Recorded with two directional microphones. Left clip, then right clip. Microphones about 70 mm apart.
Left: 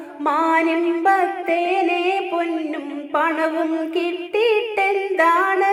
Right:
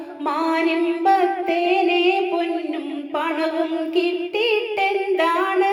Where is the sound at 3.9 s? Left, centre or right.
Centre.